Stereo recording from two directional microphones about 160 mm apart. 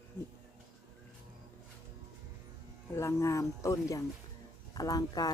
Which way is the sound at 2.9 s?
15° left (ahead or behind).